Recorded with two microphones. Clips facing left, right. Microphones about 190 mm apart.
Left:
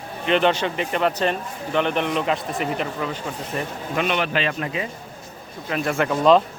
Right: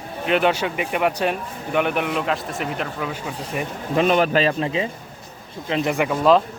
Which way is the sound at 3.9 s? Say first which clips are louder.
Right 6 dB; 40° right (ahead or behind).